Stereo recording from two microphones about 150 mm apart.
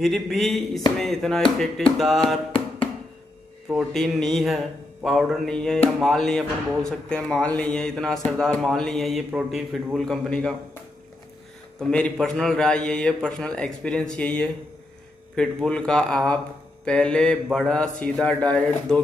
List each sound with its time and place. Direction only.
0.0 s speech: centre (ahead or behind)
3.7 s speech: centre (ahead or behind)
11.9 s speech: 5° left (ahead or behind)
13.8 s mantra: 5° left (ahead or behind)
15.3 s speech: 5° left (ahead or behind)
16.8 s mantra: 5° left (ahead or behind)
18.1 s speech: 5° left (ahead or behind)